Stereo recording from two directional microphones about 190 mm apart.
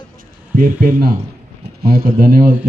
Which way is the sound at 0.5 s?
45° right (ahead or behind).